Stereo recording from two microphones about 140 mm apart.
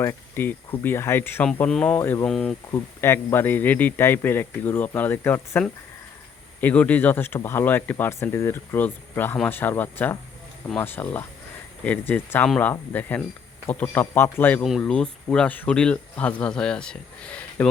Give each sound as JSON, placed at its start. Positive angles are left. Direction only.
{"t": 0.0, "sound": "speech", "side_deg": 15}
{"t": 2.2, "sound": "speech", "side_deg": 5}
{"t": 2.7, "sound": "speech", "side_deg": 20}
{"t": 14.6, "sound": "speech", "side_deg": 0}